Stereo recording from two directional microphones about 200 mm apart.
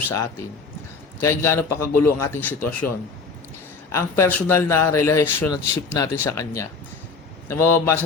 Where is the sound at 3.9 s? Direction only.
15° left (ahead or behind).